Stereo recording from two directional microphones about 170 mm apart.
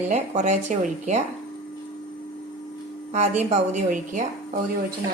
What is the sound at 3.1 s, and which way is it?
Speech, 45° right (ahead or behind).